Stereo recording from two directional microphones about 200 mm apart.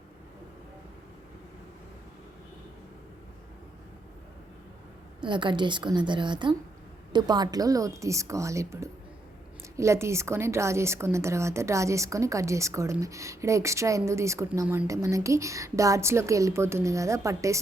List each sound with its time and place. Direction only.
5.2 s a woman's voice: 25° right (ahead or behind)